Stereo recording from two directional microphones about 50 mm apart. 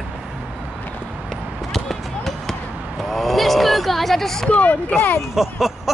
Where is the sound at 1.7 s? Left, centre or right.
Centre.